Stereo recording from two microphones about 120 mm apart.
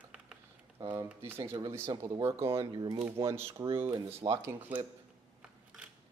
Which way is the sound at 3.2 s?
25° right (ahead or behind).